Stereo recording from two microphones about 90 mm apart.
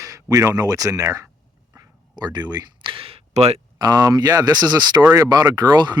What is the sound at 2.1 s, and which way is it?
Speech, 50° right (ahead or behind).